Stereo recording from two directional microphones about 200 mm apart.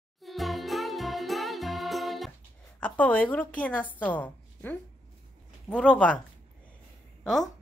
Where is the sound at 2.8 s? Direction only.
5° left (ahead or behind).